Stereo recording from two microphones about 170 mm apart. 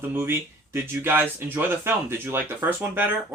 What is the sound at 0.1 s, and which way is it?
Speech, 15° right (ahead or behind).